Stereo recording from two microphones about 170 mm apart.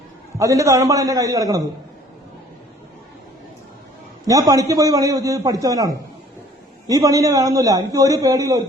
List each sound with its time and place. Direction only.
0.3 s a man's voice: 20° right (ahead or behind)
4.3 s a man's voice: 20° right (ahead or behind)